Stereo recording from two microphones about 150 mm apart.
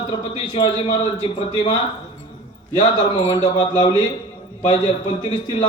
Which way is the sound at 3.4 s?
35° left (ahead or behind).